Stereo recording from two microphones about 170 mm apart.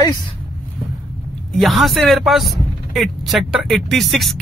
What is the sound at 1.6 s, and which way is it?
Speech, centre (ahead or behind).